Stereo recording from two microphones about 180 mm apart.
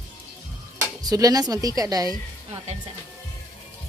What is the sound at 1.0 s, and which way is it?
Speech, 20° right (ahead or behind).